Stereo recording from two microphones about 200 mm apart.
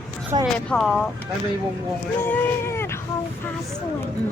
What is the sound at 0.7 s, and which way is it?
Speech, centre (ahead or behind).